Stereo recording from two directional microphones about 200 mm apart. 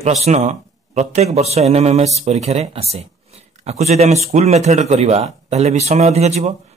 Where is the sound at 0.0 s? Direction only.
35° right (ahead or behind).